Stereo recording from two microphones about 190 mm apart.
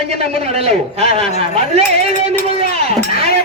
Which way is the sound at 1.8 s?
35° right (ahead or behind).